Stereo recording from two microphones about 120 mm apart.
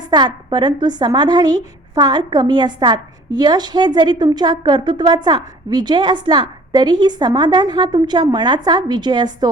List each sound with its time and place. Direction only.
0.1 s a woman's voice: 35° right (ahead or behind)